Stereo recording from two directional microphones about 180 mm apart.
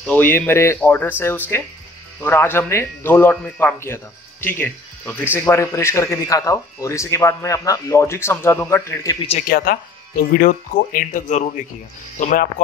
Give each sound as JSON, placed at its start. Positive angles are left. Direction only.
{"t": 0.0, "sound": "speech", "side_deg": 10}
{"t": 9.5, "sound": "speech", "side_deg": 55}